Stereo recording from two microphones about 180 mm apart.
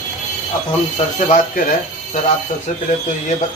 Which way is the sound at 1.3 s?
50° left (ahead or behind).